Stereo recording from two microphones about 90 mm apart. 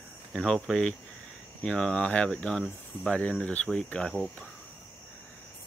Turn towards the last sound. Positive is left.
turn(degrees=10)  # may be behind; listen again after turning